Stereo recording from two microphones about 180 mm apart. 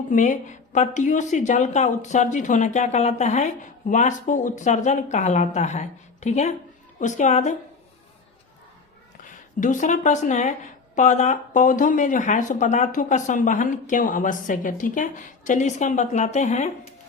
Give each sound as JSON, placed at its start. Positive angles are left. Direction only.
{"t": 0.1, "sound": "a woman's voice", "side_deg": 45}
{"t": 9.2, "sound": "a woman's voice", "side_deg": 45}